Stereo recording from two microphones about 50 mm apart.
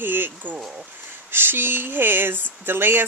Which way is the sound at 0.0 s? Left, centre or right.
Right.